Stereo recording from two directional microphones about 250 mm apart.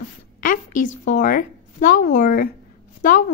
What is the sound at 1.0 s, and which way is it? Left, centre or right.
Speech, left.